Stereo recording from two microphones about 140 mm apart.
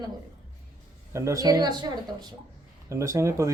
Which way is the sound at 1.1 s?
20° right (ahead or behind).